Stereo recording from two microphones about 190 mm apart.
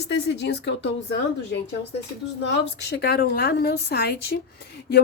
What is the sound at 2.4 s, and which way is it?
A woman's voice, 65° left (ahead or behind).